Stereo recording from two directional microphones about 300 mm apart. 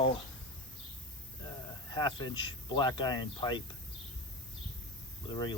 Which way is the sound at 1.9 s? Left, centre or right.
Centre.